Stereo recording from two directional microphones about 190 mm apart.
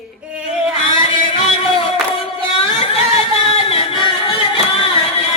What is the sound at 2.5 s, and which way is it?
Music, 30° left (ahead or behind).